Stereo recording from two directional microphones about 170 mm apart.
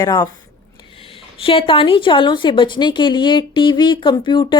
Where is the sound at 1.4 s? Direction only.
30° left (ahead or behind).